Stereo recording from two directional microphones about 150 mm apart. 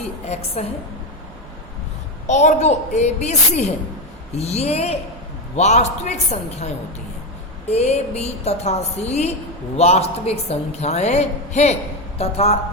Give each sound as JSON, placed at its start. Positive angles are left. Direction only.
{"t": 0.0, "sound": "a woman's voice", "side_deg": 45}
{"t": 2.2, "sound": "a woman's voice", "side_deg": 50}
{"t": 7.7, "sound": "a woman's voice", "side_deg": 45}